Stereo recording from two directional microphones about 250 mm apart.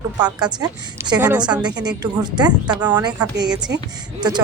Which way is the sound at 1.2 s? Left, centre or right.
Centre.